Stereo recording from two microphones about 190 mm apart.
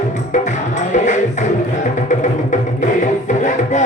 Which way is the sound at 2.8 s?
40° left (ahead or behind).